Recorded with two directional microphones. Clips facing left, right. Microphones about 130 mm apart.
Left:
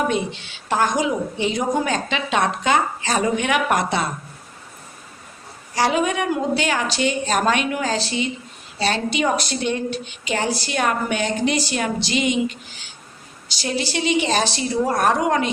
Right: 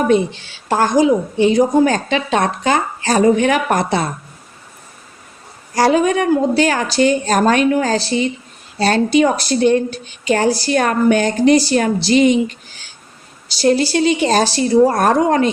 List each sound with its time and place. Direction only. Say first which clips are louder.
0.7 s a woman's voice: right 7 dB; 35° right (ahead or behind)
5.7 s a woman's voice: right 6 dB; 40° right (ahead or behind)
13.6 s a woman's voice: right 10 dB; 40° right (ahead or behind)